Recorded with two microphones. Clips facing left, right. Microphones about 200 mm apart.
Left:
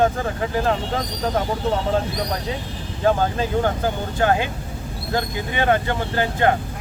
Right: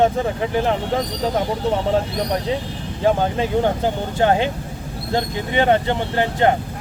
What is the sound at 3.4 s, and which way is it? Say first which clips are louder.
Speech: right 2 dB; 25° right (ahead or behind).